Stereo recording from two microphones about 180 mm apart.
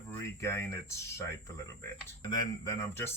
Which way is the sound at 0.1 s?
15° left (ahead or behind).